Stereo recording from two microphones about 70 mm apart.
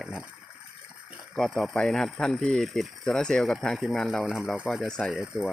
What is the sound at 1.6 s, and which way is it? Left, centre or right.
Speech, centre.